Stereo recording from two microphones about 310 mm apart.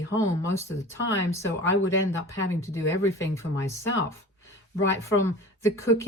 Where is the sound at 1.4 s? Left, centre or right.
Left.